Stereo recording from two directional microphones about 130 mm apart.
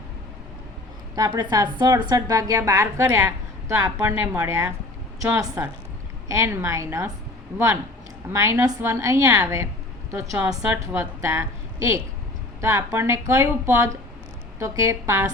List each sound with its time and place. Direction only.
1.1 s a woman's voice: 30° right (ahead or behind)